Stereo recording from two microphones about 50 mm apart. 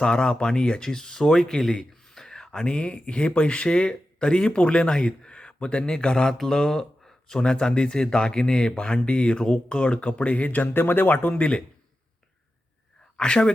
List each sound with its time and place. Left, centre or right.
0.0 s speech: centre; by 11.4 s left
13.1 s speech: centre